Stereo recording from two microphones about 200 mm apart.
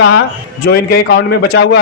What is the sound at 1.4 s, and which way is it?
Speech, 55° left (ahead or behind).